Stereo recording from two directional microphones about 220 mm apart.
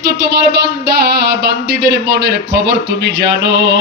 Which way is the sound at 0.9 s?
45° right (ahead or behind).